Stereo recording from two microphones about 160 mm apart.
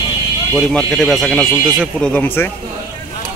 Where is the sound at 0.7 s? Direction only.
5° left (ahead or behind).